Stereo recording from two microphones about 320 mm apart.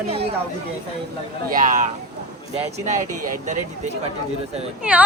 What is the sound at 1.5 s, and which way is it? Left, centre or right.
Speech, right.